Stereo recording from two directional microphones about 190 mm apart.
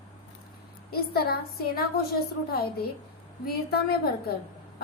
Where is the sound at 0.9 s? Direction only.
55° left (ahead or behind).